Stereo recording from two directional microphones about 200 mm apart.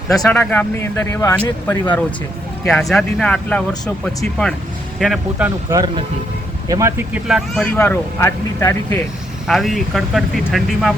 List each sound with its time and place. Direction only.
0.2 s speech: 10° left (ahead or behind)
5.7 s speech: 20° right (ahead or behind); by 9.0 s 10° left (ahead or behind)
9.5 s speech: centre (ahead or behind)